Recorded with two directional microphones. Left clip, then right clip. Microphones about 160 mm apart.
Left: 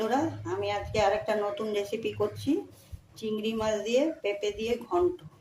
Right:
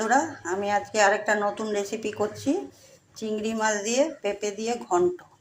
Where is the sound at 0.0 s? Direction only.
15° right (ahead or behind).